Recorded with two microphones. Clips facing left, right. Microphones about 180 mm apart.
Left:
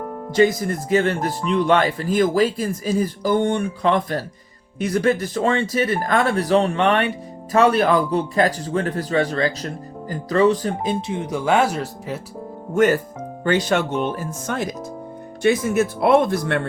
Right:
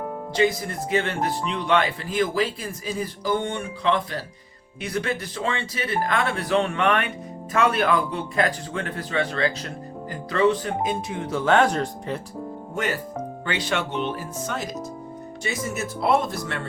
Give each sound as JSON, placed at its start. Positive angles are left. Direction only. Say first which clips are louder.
{"t": 0.3, "sound": "a man's voice", "louder": "left 5 dB", "side_deg": 45}
{"t": 12.7, "sound": "speech", "louder": "left 11 dB", "side_deg": 45}